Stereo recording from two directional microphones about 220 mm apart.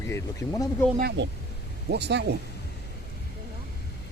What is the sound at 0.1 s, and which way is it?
Speech, 15° left (ahead or behind).